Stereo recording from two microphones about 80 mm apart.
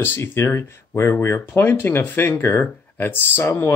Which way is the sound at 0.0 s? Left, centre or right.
Left.